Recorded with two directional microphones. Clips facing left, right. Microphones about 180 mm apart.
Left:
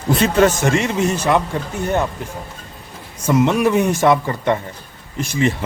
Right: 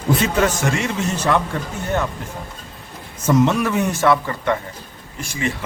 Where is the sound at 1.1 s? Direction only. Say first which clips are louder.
Even; 10° left (ahead or behind).